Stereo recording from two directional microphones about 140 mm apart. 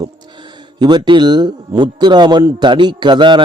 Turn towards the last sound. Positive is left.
turn(degrees=-35)  # may be behind; listen again after turning